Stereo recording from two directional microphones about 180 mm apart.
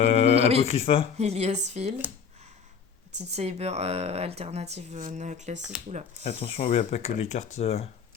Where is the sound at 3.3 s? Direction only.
35° right (ahead or behind).